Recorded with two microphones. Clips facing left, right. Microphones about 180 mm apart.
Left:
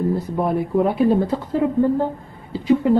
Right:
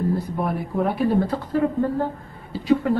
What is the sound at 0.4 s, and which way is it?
Speech, 25° left (ahead or behind).